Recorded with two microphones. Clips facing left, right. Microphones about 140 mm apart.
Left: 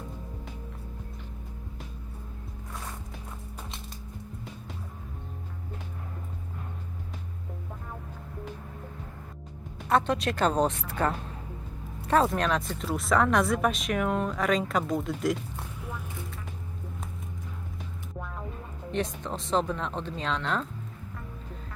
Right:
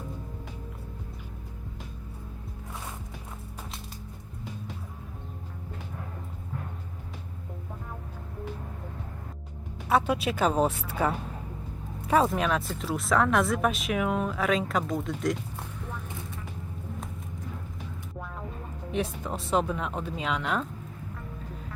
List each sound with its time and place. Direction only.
9.7 s speech: 5° right (ahead or behind)
18.9 s speech: 5° right (ahead or behind)